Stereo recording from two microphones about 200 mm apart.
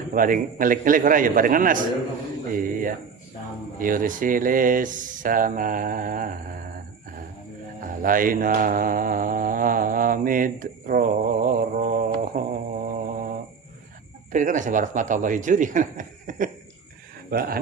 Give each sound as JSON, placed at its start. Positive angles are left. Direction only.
{"t": 0.1, "sound": "a man's voice", "side_deg": -45}
{"t": 7.8, "sound": "mantra", "side_deg": -45}
{"t": 14.3, "sound": "a man's voice", "side_deg": -40}